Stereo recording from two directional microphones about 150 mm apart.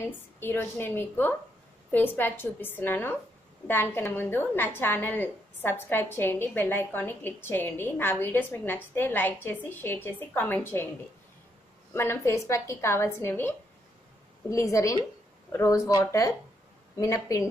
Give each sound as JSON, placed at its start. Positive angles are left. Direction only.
{"t": 0.0, "sound": "a woman's voice", "side_deg": 15}
{"t": 11.9, "sound": "a woman's voice", "side_deg": 15}